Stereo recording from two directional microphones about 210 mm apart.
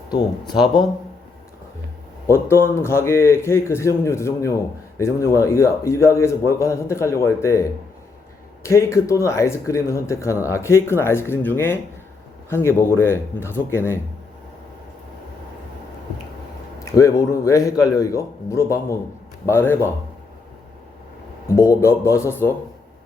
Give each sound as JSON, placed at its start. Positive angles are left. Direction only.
{"t": 2.2, "sound": "speech", "side_deg": 10}
{"t": 16.8, "sound": "speech", "side_deg": 15}
{"t": 21.5, "sound": "speech", "side_deg": 15}